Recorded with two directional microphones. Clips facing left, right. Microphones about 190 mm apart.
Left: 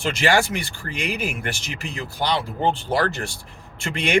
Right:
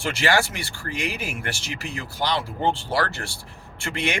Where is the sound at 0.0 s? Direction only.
15° left (ahead or behind).